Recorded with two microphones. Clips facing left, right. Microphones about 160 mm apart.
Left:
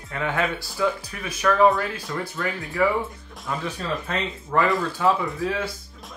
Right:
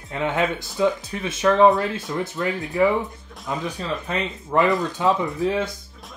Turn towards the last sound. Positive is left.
turn(degrees=-20)  # may be behind; listen again after turning